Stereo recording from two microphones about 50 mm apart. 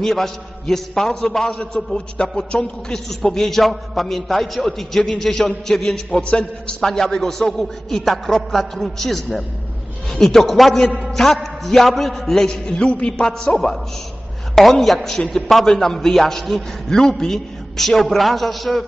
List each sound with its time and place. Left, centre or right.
0.0 s a man's voice: centre
3.3 s a man's voice: centre
13.2 s a man's voice: centre